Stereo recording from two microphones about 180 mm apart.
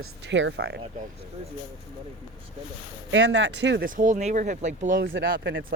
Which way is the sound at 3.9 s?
45° right (ahead or behind).